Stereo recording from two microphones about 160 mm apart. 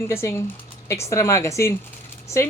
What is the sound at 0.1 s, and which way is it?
A woman's voice, 15° left (ahead or behind).